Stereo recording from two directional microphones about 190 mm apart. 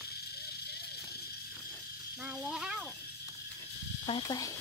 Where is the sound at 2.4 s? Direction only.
5° right (ahead or behind).